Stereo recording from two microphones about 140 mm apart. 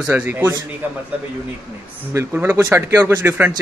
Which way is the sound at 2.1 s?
15° right (ahead or behind).